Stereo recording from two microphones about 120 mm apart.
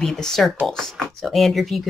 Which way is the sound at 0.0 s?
5° left (ahead or behind).